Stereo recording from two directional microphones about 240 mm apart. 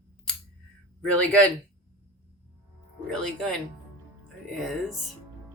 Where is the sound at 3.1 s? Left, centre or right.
Centre.